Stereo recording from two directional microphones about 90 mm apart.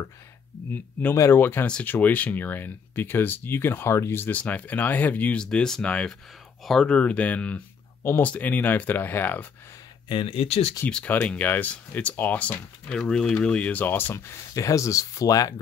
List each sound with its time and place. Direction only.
1.1 s speech: 35° left (ahead or behind)
1.4 s speech: 25° left (ahead or behind)
8.0 s speech: 25° left (ahead or behind)
10.0 s speech: 85° left
11.1 s speech: 20° left (ahead or behind); by 15.5 s 40° left (ahead or behind)